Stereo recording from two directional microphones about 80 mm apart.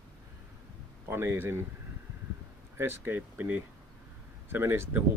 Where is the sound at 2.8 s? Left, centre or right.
Right.